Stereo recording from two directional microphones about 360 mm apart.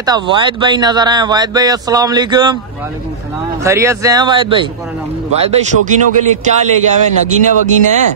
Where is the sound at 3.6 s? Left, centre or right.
Centre.